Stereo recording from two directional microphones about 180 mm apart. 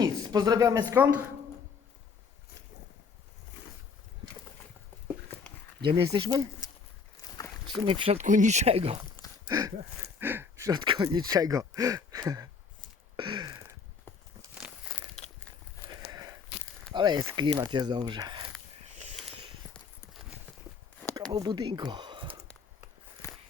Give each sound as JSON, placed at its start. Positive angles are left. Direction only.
{"t": 0.0, "sound": "speech", "side_deg": -20}
{"t": 6.1, "sound": "speech", "side_deg": -20}
{"t": 7.9, "sound": "speech", "side_deg": -30}
{"t": 9.5, "sound": "speech", "side_deg": -20}
{"t": 13.1, "sound": "a sound", "side_deg": -25}
{"t": 16.9, "sound": "speech", "side_deg": -25}
{"t": 21.2, "sound": "speech", "side_deg": -20}
{"t": 23.2, "sound": "a sound", "side_deg": 15}